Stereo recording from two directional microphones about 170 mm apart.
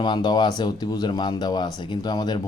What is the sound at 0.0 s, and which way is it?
Speech, 25° left (ahead or behind).